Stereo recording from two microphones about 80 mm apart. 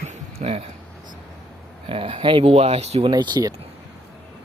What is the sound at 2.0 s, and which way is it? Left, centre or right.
Speech, right.